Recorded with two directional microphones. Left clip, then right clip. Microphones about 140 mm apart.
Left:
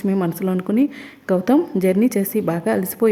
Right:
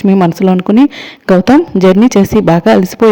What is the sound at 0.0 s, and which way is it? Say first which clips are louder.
Speech: right 12 dB; 45° right (ahead or behind).